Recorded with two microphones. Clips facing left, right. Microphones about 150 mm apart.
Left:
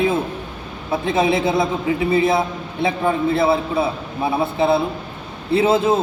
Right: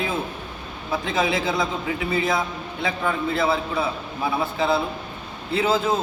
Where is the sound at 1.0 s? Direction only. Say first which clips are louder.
Left 6 dB; 25° left (ahead or behind).